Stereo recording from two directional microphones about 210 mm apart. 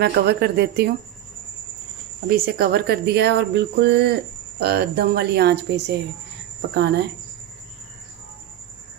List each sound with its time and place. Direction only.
0.0 s speech: 50° right (ahead or behind)
2.2 s speech: 45° right (ahead or behind)